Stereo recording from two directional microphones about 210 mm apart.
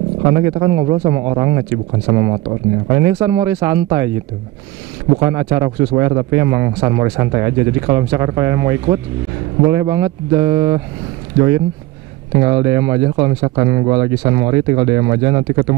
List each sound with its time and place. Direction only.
0.2 s speech: 15° right (ahead or behind)
5.2 s speech: 15° right (ahead or behind)